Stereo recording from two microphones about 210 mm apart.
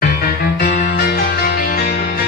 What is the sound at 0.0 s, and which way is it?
Music, 45° left (ahead or behind).